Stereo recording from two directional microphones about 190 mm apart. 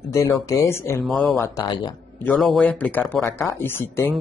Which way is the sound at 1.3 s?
15° left (ahead or behind).